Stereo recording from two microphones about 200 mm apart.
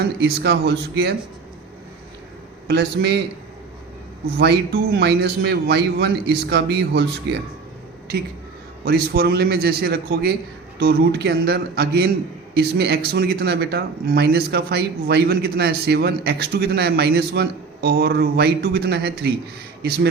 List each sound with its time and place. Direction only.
0.0 s speech: 55° right (ahead or behind)
2.6 s speech: 55° right (ahead or behind)
4.4 s speech: 55° right (ahead or behind)
8.8 s speech: 55° right (ahead or behind)